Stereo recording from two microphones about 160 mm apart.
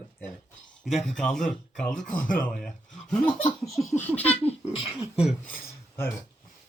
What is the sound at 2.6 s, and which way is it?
Speech, 5° left (ahead or behind).